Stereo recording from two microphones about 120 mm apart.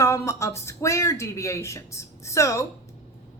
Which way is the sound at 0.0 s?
25° left (ahead or behind).